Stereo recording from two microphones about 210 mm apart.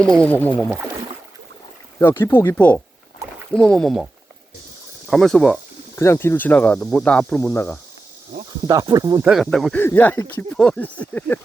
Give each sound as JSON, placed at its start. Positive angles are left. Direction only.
{"t": 0.0, "sound": "speech", "side_deg": 5}
{"t": 2.0, "sound": "speech", "side_deg": 10}
{"t": 8.6, "sound": "speech", "side_deg": -15}
{"t": 9.2, "sound": "speech", "side_deg": 0}